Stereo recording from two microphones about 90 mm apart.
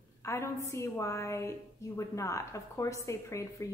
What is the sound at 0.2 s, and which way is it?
A woman's voice, 30° left (ahead or behind).